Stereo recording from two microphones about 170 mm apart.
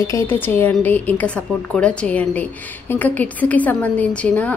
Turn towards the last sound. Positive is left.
turn(degrees=10)  # may be behind; listen again after turning